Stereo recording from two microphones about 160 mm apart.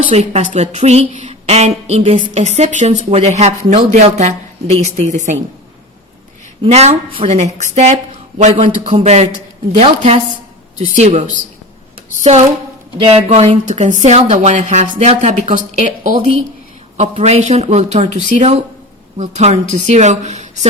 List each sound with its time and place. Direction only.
0.1 s a woman's voice: 45° right (ahead or behind)
6.7 s a woman's voice: 40° right (ahead or behind)